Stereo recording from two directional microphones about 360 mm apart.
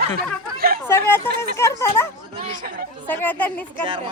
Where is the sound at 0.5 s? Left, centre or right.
Right.